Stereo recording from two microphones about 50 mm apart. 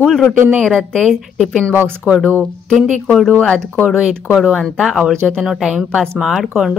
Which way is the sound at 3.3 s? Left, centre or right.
Left.